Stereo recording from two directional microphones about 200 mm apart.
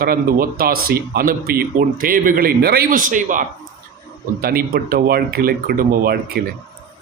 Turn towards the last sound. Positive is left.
turn(degrees=-50)  # may be behind; listen again after turning